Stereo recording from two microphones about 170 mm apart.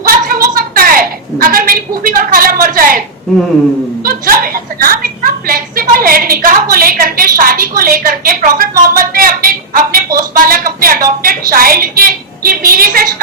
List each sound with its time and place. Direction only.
0.0 s a sound: 55° right (ahead or behind)
2.0 s a woman's voice: 55° right (ahead or behind)
4.0 s a woman's voice: 55° right (ahead or behind)